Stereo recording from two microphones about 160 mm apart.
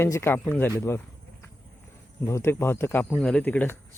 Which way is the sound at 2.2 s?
15° left (ahead or behind).